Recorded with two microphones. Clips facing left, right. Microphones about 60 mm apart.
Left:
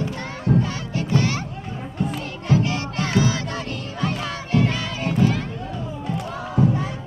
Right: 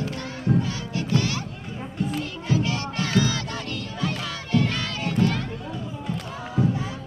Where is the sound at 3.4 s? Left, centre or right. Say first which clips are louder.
Left 3 dB; left.